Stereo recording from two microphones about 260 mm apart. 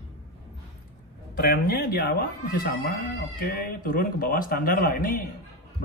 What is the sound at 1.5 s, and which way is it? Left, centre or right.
Speech, left.